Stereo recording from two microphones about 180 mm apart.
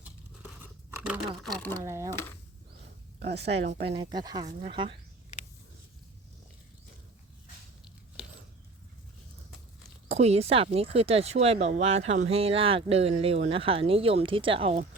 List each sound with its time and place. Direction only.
0.6 s a sound: 10° right (ahead or behind)
1.5 s speech: 10° left (ahead or behind)
1.8 s speech: 15° right (ahead or behind)
3.2 s speech: 65° right (ahead or behind)
3.9 s speech: 25° right (ahead or behind)
10.1 s speech: 35° right (ahead or behind)